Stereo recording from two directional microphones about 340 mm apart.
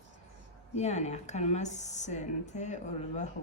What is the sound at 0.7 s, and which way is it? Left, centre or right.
A woman's voice, centre.